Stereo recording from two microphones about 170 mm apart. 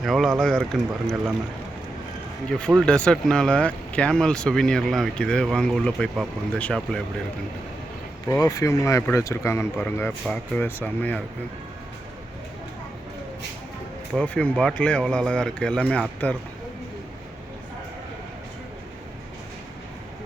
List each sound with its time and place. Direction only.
0.0 s speech: centre (ahead or behind)
2.5 s speech: 5° left (ahead or behind)
8.3 s speech: 20° left (ahead or behind)
14.2 s speech: 5° left (ahead or behind)